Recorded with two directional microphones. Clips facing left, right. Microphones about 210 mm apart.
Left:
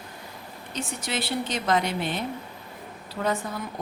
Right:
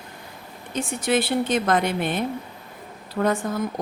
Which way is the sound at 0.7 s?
55° right (ahead or behind).